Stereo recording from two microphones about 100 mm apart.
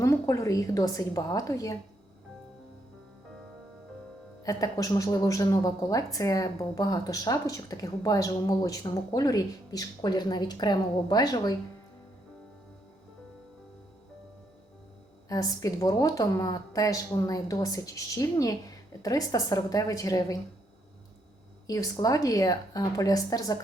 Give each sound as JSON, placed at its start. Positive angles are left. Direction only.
{"t": 0.0, "sound": "a woman's voice", "side_deg": 30}
{"t": 4.4, "sound": "a woman's voice", "side_deg": 35}
{"t": 15.3, "sound": "a woman's voice", "side_deg": 35}
{"t": 21.7, "sound": "a woman's voice", "side_deg": 35}